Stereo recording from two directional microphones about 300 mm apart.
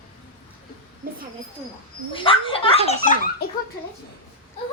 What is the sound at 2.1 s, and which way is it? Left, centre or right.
A woman's voice, centre.